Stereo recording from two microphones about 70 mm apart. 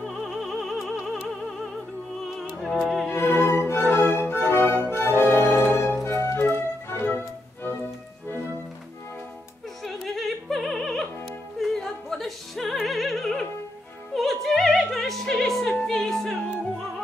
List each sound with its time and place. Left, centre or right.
0.0 s music: centre
2.8 s music: centre
3.2 s music: left
9.8 s opera: centre